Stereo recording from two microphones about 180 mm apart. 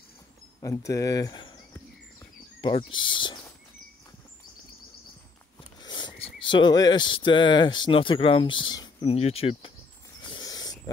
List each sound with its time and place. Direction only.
0.6 s speech: 20° left (ahead or behind)
2.6 s speech: 25° left (ahead or behind)
5.8 s speech: 25° left (ahead or behind)
10.2 s a sound: 25° left (ahead or behind)